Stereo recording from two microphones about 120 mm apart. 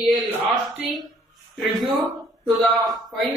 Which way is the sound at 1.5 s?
Centre (ahead or behind).